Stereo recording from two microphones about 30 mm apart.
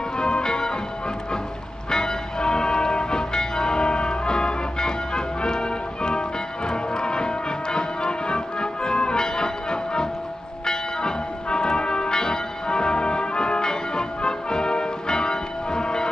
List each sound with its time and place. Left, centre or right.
0.2 s music: left
1.9 s music: left
10.6 s bell: left